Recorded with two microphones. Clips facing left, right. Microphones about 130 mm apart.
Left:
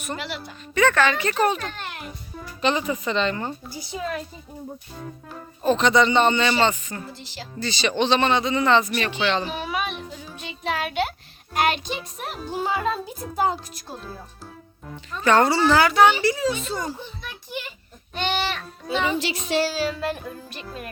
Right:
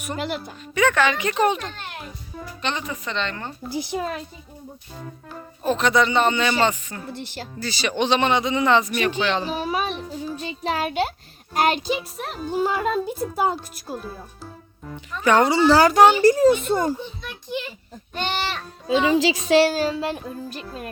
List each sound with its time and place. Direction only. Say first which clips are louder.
0.7 s speech: even; 10° right (ahead or behind)
2.6 s a child's voice: left 6 dB; 5° left (ahead or behind)
5.6 s a child's voice: left 1 dB; 5° right (ahead or behind)
7.1 s a woman's voice: right 5 dB; 55° right (ahead or behind)
7.6 s speech: left 1 dB; 5° right (ahead or behind)
9.4 s speech: right 3 dB; 35° right (ahead or behind)
11.9 s a child's voice: right 5 dB; 5° right (ahead or behind)
15.2 s speech: right 1 dB; 15° right (ahead or behind)
15.6 s a child's voice: right 3 dB; 35° right (ahead or behind); by 17.0 s 55° right (ahead or behind)
18.1 s a child's voice: left 1 dB; 45° right (ahead or behind)
18.9 s a woman's voice: right 6 dB; 90° right
20.5 s speech: right 2 dB; 35° right (ahead or behind)